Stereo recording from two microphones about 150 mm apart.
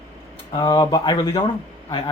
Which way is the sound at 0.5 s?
30° left (ahead or behind).